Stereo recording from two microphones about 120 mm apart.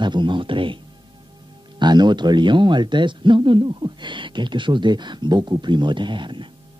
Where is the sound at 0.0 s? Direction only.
40° right (ahead or behind).